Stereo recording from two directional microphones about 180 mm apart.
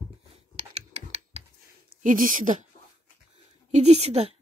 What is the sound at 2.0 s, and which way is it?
Speech, 45° right (ahead or behind).